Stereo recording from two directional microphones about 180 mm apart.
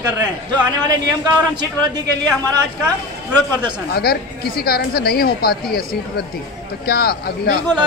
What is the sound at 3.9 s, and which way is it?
Speech, 60° left (ahead or behind).